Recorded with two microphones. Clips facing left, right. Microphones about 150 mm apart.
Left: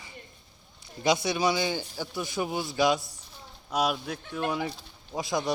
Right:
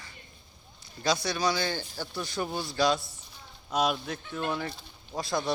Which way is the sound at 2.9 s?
45° left (ahead or behind).